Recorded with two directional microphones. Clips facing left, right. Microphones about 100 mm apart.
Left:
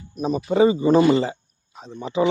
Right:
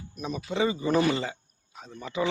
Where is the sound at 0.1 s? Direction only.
35° left (ahead or behind).